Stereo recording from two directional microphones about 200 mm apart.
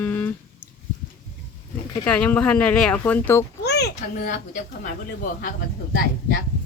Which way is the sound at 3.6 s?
55° left (ahead or behind).